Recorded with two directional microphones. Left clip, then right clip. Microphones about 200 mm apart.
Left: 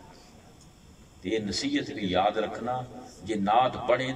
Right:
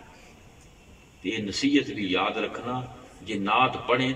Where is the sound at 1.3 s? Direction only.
30° left (ahead or behind).